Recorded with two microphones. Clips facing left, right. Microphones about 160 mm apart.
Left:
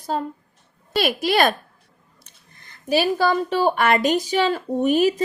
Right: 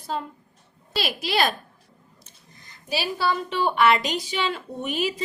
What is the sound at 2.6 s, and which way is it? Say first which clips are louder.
Speech: left 9 dB; 55° left (ahead or behind).